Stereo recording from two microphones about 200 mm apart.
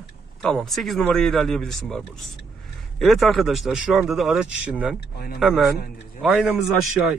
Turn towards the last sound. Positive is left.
turn(degrees=-5)  # may be behind; listen again after turning